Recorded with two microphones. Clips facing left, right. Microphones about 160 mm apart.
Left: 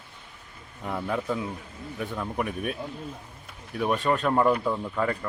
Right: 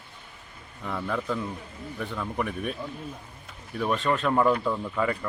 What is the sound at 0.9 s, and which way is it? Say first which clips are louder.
Speech: left 1 dB; 15° left (ahead or behind).